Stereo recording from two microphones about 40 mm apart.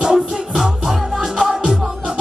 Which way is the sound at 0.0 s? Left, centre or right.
Centre.